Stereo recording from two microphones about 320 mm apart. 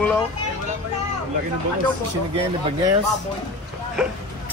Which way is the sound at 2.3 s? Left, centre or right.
Centre.